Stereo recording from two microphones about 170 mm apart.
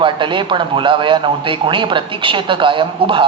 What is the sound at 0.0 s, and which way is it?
Speech, 30° right (ahead or behind).